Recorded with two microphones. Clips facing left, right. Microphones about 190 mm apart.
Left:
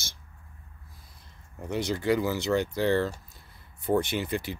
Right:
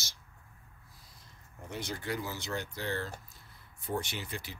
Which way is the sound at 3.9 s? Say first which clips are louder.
Left 10 dB; 60° left (ahead or behind).